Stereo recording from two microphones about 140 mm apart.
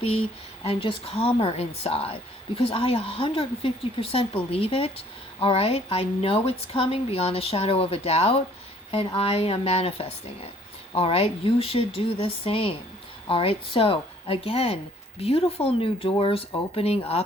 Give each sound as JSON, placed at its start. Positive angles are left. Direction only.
{"t": 0.6, "sound": "a woman's voice", "side_deg": 40}